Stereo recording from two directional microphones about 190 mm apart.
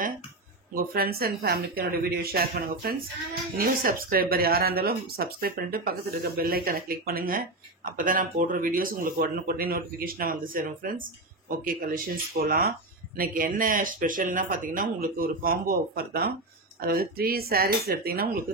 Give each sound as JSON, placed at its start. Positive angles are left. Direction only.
{"t": 0.7, "sound": "speech", "side_deg": -55}